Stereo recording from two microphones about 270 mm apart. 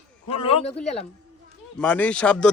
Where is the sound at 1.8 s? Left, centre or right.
Centre.